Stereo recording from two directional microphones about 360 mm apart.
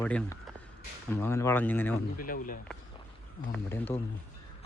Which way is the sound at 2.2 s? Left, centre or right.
Left.